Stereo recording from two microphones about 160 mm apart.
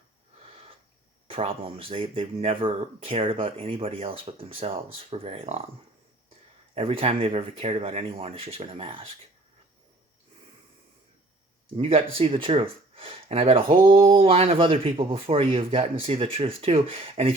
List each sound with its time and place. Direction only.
1.3 s speech: 35° right (ahead or behind)
6.7 s speech: 35° right (ahead or behind)
11.8 s speech: 35° right (ahead or behind)